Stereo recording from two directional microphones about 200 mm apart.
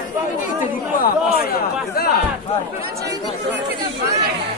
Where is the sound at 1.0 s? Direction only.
50° left (ahead or behind).